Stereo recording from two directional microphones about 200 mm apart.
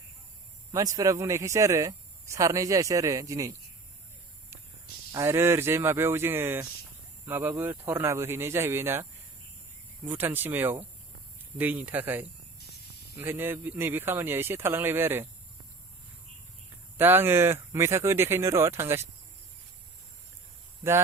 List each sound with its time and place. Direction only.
0.7 s speech: 15° right (ahead or behind)
5.1 s speech: 15° right (ahead or behind)
10.1 s speech: 10° right (ahead or behind)
17.0 s speech: 10° right (ahead or behind)